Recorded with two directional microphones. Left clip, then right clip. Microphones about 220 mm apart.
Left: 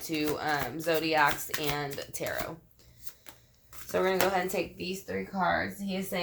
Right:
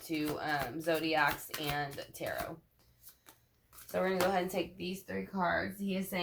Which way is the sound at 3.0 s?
15° left (ahead or behind).